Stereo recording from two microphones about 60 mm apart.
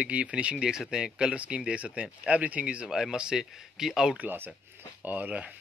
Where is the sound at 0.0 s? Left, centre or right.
Right.